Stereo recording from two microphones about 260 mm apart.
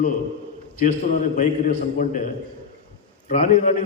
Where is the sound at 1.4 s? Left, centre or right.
Left.